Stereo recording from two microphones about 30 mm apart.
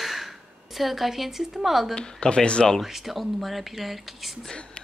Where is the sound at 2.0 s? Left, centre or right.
Left.